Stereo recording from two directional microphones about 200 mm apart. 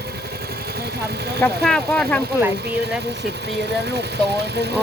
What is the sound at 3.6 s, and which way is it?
Speech, 55° right (ahead or behind).